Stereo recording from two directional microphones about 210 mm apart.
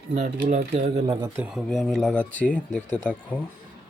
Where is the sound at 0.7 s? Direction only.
30° right (ahead or behind).